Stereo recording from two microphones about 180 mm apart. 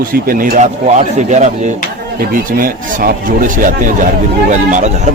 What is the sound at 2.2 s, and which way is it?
Speech, 50° right (ahead or behind).